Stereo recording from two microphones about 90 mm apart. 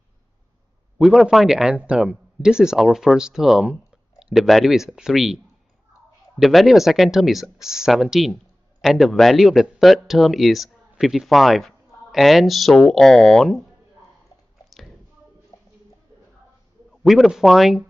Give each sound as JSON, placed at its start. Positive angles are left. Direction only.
{"t": 0.9, "sound": "a man's voice", "side_deg": -5}
{"t": 15.5, "sound": "a sound", "side_deg": 45}
{"t": 16.9, "sound": "a man's voice", "side_deg": 0}